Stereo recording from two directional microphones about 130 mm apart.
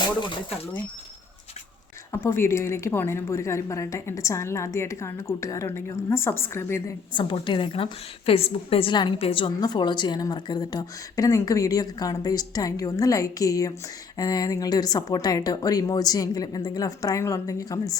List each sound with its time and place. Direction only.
2.1 s a woman's voice: 20° left (ahead or behind)
7.1 s a woman's voice: 40° left (ahead or behind)